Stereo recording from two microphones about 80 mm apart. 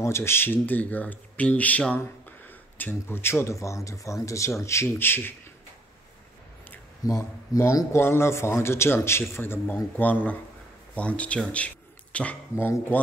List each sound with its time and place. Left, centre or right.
0.0 s speech: left
7.0 s speech: left; by 12.4 s centre
12.5 s speech: left